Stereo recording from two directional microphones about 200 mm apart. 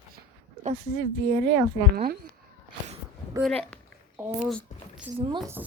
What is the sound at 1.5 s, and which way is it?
Speech, 20° right (ahead or behind).